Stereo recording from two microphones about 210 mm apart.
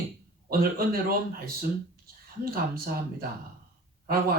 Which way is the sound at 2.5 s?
45° right (ahead or behind).